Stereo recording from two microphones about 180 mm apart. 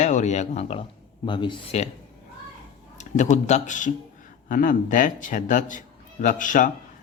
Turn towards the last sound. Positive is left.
turn(degrees=45)  # may be behind; listen again after turning